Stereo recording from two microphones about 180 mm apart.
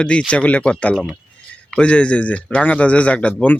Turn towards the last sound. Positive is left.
turn(degrees=10)  # may be behind; listen again after turning